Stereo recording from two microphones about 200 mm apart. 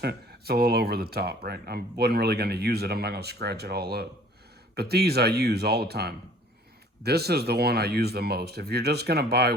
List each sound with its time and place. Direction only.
0.0 s speech: 55° right (ahead or behind)